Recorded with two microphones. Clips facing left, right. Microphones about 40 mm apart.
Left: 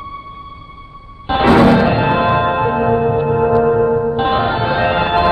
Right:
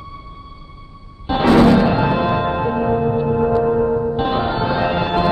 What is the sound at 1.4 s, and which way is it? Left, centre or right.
Music, left.